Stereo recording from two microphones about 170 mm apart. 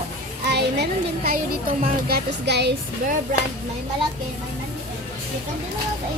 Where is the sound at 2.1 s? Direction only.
85° right.